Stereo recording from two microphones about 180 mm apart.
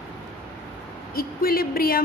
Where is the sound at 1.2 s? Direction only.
55° left (ahead or behind).